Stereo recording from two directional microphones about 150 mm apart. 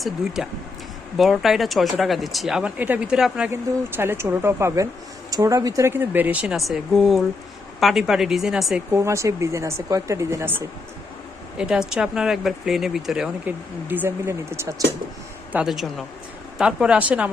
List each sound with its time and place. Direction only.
0.4 s speech: centre (ahead or behind)
3.5 s speech: 15° right (ahead or behind)
8.9 s speech: 20° right (ahead or behind)
11.5 s speech: 5° right (ahead or behind)
15.5 s speech: centre (ahead or behind)